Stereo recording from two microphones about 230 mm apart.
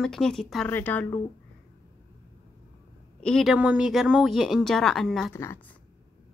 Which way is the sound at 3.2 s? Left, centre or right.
Centre.